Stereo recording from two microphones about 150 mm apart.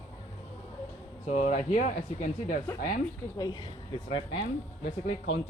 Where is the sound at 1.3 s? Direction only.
55° left (ahead or behind).